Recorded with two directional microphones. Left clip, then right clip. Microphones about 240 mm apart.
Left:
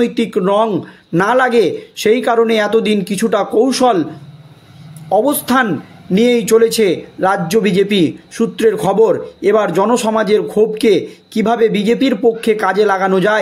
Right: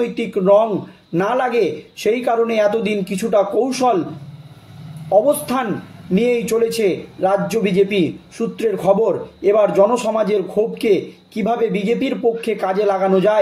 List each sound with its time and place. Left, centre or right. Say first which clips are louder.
0.0 s a man's voice: left 3 dB; left
5.1 s a man's voice: left 2 dB; left